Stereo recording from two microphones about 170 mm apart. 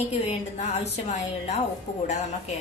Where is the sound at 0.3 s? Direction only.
40° left (ahead or behind).